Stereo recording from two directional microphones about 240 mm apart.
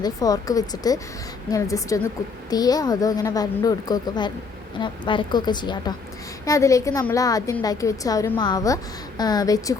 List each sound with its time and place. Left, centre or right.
0.0 s a woman's voice: centre